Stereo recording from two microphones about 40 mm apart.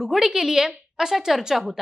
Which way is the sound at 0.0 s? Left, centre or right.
Centre.